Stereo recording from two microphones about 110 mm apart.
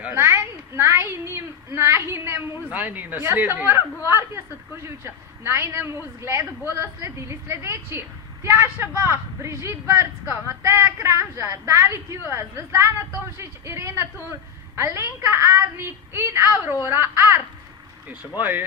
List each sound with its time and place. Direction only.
0.0 s a woman's voice: 20° right (ahead or behind)